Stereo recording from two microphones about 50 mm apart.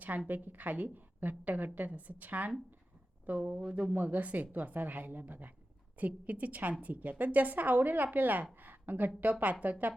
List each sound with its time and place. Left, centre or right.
0.3 s a woman's voice: right
3.4 s a woman's voice: right